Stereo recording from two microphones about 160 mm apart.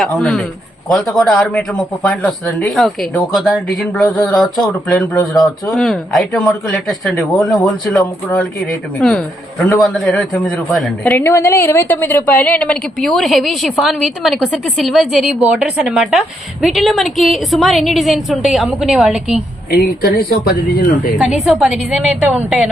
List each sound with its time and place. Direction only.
0.0 s a woman's voice: 5° left (ahead or behind)
4.9 s a man's voice: 20° left (ahead or behind)
5.2 s a woman's voice: centre (ahead or behind)
9.0 s a woman's voice: 5° left (ahead or behind)
11.2 s a woman's voice: 15° left (ahead or behind); by 19.4 s centre (ahead or behind)
19.7 s speech: 75° left (ahead or behind)
21.2 s a woman's voice: 5° right (ahead or behind)